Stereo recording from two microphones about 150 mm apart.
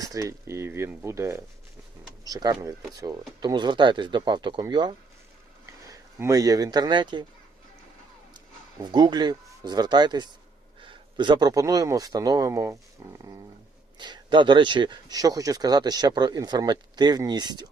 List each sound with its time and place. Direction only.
0.0 s speech: 20° right (ahead or behind)
8.8 s speech: 30° right (ahead or behind)